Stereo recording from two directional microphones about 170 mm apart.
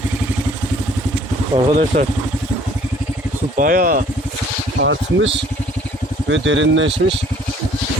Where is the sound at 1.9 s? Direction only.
45° right (ahead or behind).